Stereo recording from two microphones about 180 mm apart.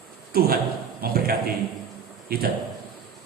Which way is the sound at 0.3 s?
55° right (ahead or behind).